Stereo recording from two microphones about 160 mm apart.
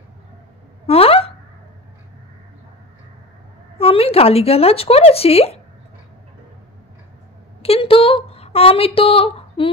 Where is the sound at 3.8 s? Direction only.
35° left (ahead or behind).